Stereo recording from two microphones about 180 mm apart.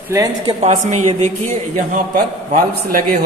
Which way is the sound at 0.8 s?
40° right (ahead or behind).